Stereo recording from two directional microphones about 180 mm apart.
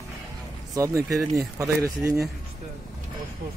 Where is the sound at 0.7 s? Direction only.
20° right (ahead or behind).